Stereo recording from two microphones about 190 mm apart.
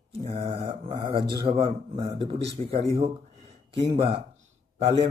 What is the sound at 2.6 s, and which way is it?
Speech, 35° right (ahead or behind).